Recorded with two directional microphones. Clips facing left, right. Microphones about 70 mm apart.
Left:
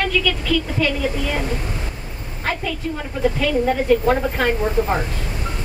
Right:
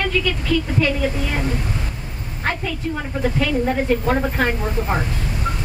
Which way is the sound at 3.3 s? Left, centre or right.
Right.